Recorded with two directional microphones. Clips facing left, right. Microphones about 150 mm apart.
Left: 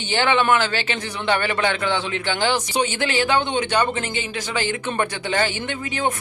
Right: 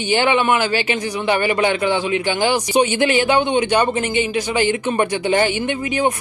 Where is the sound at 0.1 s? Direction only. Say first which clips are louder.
Right 2 dB; 15° right (ahead or behind).